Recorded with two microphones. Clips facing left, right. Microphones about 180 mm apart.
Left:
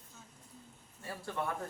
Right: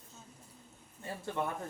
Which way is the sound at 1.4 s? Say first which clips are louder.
Right 1 dB; 20° right (ahead or behind).